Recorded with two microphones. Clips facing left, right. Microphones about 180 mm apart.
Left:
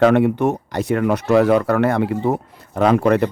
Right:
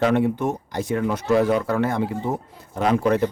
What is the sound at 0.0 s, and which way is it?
Speech, 70° left (ahead or behind).